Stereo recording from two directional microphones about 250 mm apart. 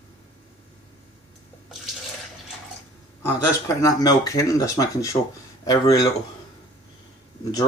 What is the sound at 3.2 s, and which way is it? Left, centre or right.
Speech, centre.